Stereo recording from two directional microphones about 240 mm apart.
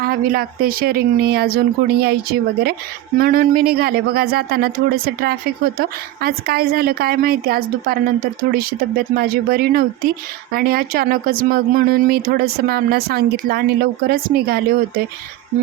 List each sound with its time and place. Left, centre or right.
0.0 s speech: right